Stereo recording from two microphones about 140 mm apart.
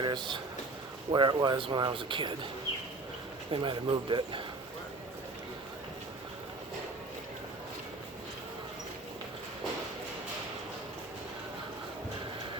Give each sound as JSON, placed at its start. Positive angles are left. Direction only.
{"t": 0.0, "sound": "speech", "side_deg": -35}
{"t": 3.5, "sound": "speech", "side_deg": -40}